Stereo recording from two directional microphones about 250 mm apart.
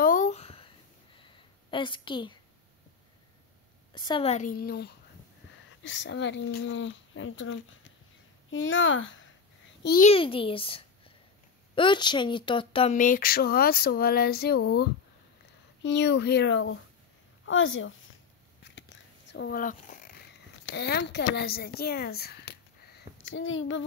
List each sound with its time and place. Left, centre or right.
0.0 s a sound: left
3.9 s a woman's voice: centre; by 9.3 s left
9.8 s a child's voice: left
18.6 s biting: left
20.7 s a woman's voice: left